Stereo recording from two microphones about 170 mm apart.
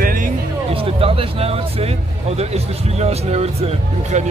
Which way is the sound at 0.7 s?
35° right (ahead or behind).